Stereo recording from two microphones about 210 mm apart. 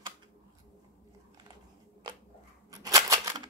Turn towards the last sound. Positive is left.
turn(degrees=-15)  # may be behind; listen again after turning